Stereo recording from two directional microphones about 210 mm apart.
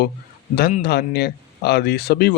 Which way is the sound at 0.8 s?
50° left (ahead or behind).